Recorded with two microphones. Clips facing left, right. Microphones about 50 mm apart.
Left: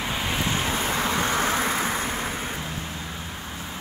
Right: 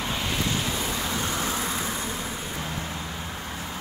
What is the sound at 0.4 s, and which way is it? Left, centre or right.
Vehicle, left.